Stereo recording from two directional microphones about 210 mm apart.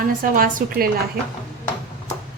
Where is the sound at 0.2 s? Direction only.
40° right (ahead or behind).